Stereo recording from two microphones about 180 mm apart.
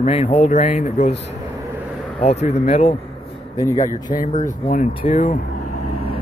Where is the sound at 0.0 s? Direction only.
35° left (ahead or behind).